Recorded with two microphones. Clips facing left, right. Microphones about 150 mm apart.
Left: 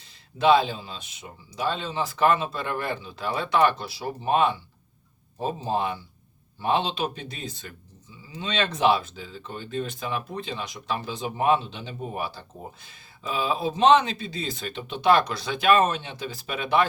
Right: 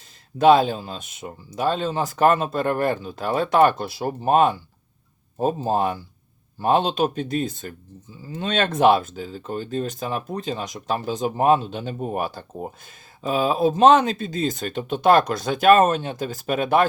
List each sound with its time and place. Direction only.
0.3 s speech: 45° right (ahead or behind)